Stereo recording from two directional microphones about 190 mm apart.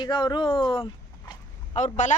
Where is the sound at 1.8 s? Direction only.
40° left (ahead or behind).